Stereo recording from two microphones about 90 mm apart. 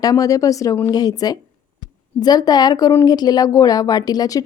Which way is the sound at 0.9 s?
45° left (ahead or behind).